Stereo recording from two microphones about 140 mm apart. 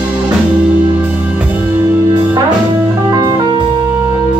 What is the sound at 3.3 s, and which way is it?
Music, 35° right (ahead or behind).